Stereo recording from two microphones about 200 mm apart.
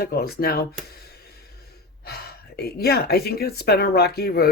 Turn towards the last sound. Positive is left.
turn(degrees=50)  # may be behind; listen again after turning